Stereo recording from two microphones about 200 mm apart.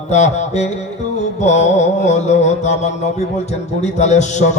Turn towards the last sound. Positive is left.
turn(degrees=35)  # may be behind; listen again after turning